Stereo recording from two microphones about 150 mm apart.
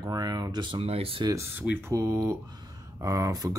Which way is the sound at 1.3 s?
15° right (ahead or behind).